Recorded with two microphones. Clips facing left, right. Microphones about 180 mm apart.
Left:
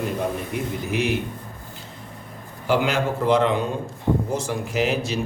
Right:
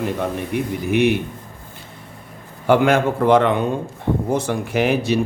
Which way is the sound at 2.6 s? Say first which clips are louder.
Right 6 dB; 55° right (ahead or behind).